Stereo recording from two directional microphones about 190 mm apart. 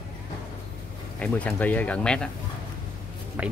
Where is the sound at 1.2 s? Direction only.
5° left (ahead or behind).